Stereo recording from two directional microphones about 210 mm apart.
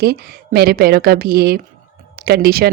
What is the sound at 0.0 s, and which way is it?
A woman's voice, 50° right (ahead or behind).